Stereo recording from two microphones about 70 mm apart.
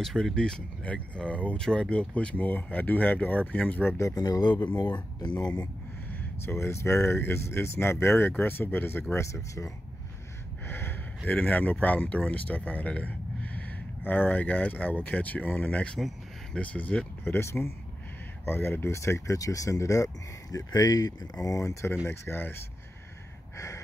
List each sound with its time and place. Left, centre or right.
0.0 s speech: centre; by 3.9 s left
4.1 s speech: left
5.3 s speech: centre
6.4 s speech: left
9.1 s speech: left
10.7 s speech: left
20.5 s speech: left
22.0 s speech: left